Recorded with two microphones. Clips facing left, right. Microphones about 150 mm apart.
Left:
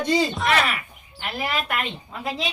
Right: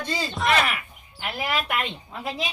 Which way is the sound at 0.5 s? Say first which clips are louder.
Left 1 dB; 15° right (ahead or behind).